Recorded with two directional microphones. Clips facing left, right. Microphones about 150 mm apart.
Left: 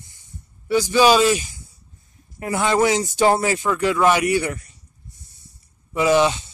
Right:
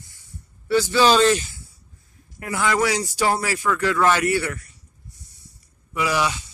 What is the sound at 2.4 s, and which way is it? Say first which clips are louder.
Speech: left 3 dB; 25° left (ahead or behind).